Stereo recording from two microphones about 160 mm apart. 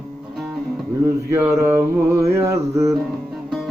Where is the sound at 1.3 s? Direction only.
15° right (ahead or behind).